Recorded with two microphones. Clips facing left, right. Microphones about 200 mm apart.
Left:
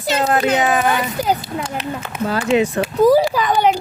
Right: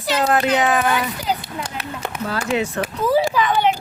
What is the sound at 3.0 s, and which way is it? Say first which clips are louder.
Speech: left 6 dB; 40° left (ahead or behind).